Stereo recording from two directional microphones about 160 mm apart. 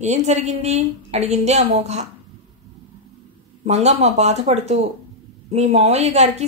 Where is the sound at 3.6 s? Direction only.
45° right (ahead or behind).